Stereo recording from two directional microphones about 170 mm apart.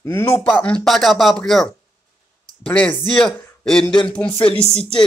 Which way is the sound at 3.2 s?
5° left (ahead or behind).